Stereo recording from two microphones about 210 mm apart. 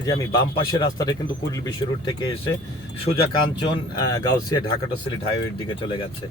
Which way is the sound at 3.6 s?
20° left (ahead or behind).